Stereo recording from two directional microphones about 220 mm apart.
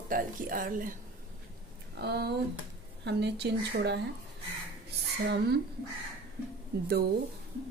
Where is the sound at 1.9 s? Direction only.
50° right (ahead or behind).